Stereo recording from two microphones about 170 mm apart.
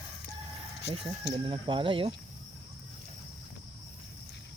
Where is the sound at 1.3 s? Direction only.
30° right (ahead or behind).